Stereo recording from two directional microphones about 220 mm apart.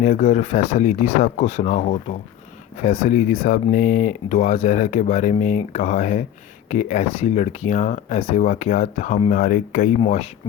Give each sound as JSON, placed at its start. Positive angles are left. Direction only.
{"t": 0.0, "sound": "speech", "side_deg": 35}